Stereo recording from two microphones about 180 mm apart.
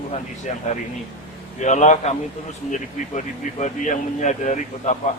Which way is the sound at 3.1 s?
40° left (ahead or behind).